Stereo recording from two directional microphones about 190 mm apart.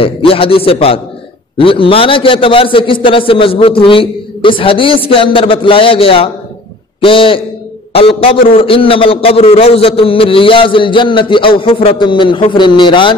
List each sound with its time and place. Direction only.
0.0 s a man's voice: 30° left (ahead or behind)